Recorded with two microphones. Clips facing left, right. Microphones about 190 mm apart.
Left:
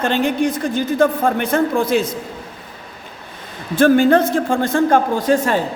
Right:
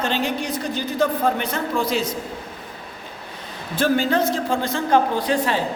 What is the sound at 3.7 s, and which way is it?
A woman's voice, 50° left (ahead or behind).